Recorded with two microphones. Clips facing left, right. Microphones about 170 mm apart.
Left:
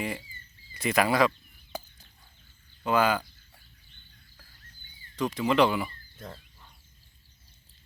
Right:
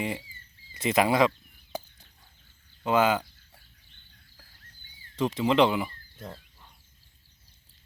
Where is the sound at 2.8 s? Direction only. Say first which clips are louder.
Right 1 dB; 20° right (ahead or behind).